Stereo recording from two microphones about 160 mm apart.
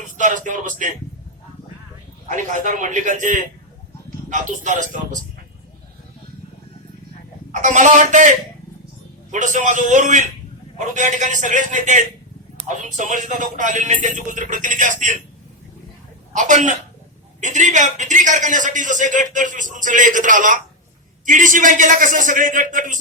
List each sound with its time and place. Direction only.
0.2 s a man's voice: 50° right (ahead or behind)
2.2 s a man's voice: 50° right (ahead or behind)
7.5 s a man's voice: 50° right (ahead or behind)
9.3 s a man's voice: 50° right (ahead or behind)
16.3 s a man's voice: 50° right (ahead or behind)